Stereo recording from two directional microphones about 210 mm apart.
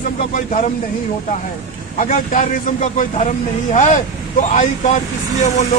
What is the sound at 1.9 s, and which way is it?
A man's voice, 35° left (ahead or behind).